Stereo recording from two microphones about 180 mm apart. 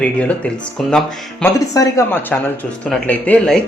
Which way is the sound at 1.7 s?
20° left (ahead or behind).